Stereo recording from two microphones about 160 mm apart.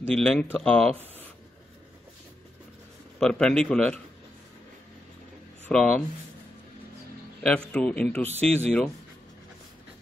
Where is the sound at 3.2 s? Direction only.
5° left (ahead or behind).